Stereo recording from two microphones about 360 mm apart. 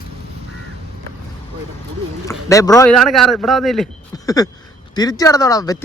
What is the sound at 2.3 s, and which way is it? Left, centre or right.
Speech, centre.